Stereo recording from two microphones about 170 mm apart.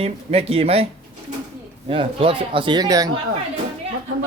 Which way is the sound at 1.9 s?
30° right (ahead or behind).